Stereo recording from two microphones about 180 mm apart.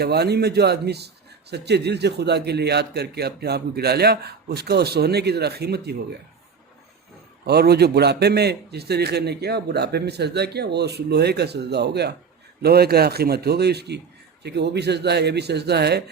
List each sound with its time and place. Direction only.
0.0 s a man's voice: 65° right (ahead or behind)
7.4 s a man's voice: 65° right (ahead or behind)